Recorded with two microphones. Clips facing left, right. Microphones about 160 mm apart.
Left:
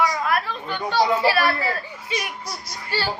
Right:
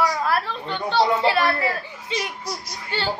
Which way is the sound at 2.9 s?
20° right (ahead or behind).